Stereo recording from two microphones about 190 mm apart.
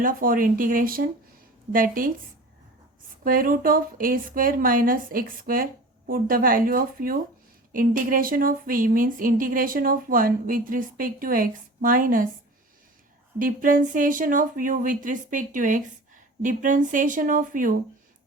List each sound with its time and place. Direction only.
0.0 s speech: 45° right (ahead or behind)
3.2 s speech: 50° right (ahead or behind)
13.4 s speech: 45° right (ahead or behind)